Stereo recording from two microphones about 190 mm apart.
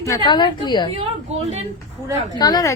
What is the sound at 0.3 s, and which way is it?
Speech, 25° left (ahead or behind).